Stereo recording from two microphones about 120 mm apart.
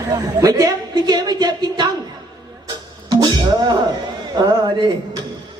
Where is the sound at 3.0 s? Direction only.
35° right (ahead or behind).